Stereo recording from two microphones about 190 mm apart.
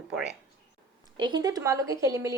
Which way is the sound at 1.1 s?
25° right (ahead or behind).